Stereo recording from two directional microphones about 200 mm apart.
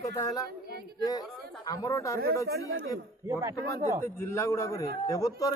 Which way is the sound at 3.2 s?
15° right (ahead or behind).